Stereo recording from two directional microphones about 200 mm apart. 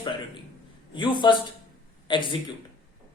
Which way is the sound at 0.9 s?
25° left (ahead or behind).